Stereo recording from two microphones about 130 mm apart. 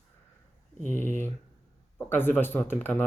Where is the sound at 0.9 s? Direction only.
15° left (ahead or behind).